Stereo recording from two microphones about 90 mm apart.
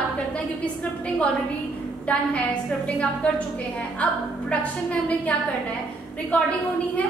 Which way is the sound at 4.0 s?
15° left (ahead or behind).